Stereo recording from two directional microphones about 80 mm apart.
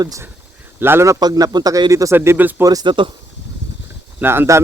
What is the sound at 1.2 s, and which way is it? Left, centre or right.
Speech, right.